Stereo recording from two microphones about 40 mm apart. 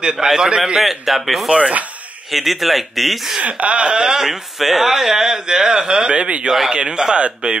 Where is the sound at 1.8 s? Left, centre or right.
Right.